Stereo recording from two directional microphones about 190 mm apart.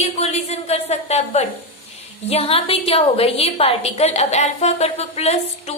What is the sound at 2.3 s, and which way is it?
A woman's voice, 30° left (ahead or behind).